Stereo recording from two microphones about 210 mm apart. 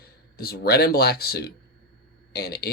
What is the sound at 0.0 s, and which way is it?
Speech, 45° left (ahead or behind).